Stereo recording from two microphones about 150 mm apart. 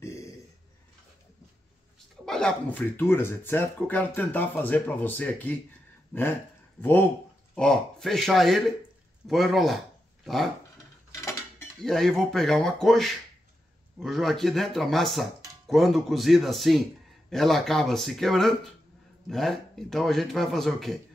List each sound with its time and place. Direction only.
0.0 s a sound: 20° left (ahead or behind)
2.2 s speech: 5° left (ahead or behind)
6.8 s speech: 15° left (ahead or behind)
10.2 s dog: centre (ahead or behind)
11.8 s speech: centre (ahead or behind)